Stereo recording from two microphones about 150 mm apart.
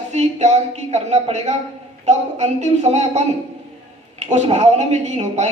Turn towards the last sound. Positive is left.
turn(degrees=-50)  # may be behind; listen again after turning